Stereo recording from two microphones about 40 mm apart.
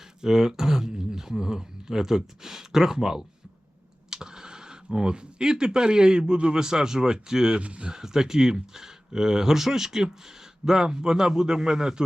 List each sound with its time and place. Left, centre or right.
0.2 s speech: centre
7.6 s speech: right
7.9 s speech: centre